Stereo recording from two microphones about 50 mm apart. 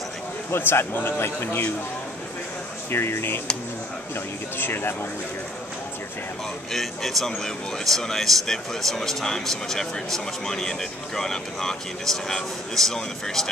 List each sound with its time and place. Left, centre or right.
0.5 s a man's voice: left
2.9 s a man's voice: left
4.6 s a man's voice: left
6.7 s speech: centre